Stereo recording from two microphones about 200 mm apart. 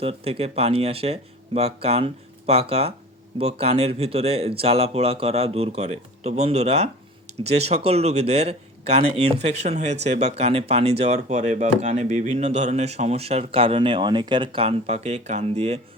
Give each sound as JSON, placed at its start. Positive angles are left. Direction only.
{"t": 0.0, "sound": "speech", "side_deg": -30}